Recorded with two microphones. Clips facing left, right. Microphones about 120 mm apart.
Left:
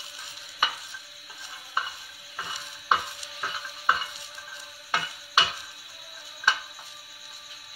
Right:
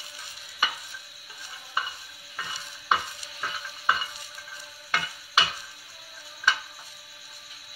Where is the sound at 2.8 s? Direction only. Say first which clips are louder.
Left 1 dB; 10° left (ahead or behind).